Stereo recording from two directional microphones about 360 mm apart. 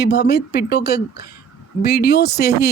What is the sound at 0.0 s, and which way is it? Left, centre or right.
Speech, left.